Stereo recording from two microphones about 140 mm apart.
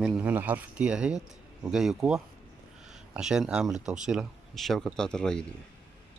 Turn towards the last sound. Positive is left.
turn(degrees=5)  # may be behind; listen again after turning